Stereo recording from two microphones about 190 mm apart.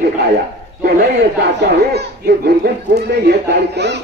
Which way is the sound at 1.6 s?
60° right (ahead or behind).